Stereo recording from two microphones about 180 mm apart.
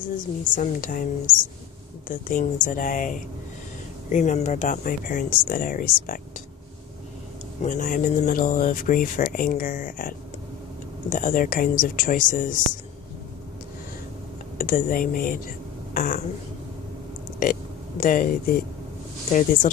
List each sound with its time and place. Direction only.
0.5 s speech: 45° left (ahead or behind)
7.6 s speech: 45° left (ahead or behind)
14.6 s speech: 50° left (ahead or behind)
17.4 s speech: 50° left (ahead or behind)